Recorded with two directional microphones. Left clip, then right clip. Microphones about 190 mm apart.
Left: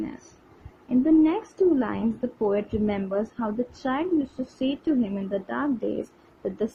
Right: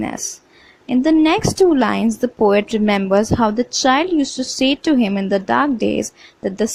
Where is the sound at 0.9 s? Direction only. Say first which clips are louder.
Right 6 dB; 55° right (ahead or behind).